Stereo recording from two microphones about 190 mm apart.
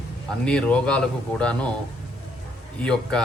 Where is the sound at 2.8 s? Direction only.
5° left (ahead or behind).